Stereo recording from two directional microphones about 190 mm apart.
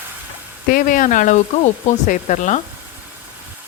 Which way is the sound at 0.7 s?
45° left (ahead or behind).